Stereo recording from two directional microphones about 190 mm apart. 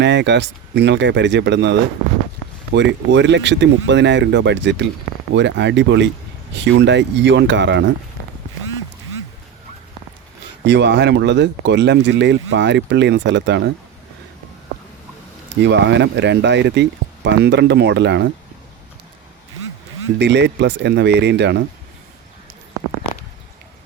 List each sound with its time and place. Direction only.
0.0 s speech: 70° right (ahead or behind)
10.7 s speech: 65° right (ahead or behind)
15.6 s speech: 65° right (ahead or behind)
20.1 s speech: 65° right (ahead or behind)